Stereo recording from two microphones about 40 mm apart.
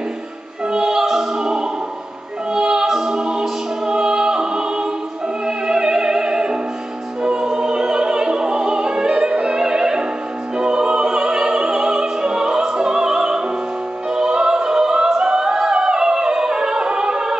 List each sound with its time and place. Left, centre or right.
0.7 s music: centre
1.3 s opera: centre
2.5 s music: centre
7.2 s opera: centre
9.6 s music: centre
10.6 s opera: right
15.1 s music: centre